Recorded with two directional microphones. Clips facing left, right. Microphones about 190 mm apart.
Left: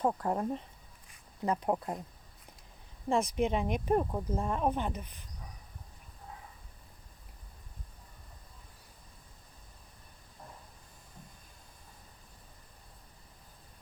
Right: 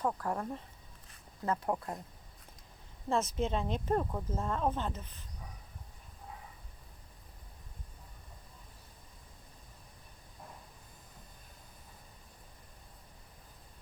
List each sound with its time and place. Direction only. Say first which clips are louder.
0.0 s speech: left 4 dB; 25° left (ahead or behind)
3.1 s speech: left 3 dB; 15° left (ahead or behind)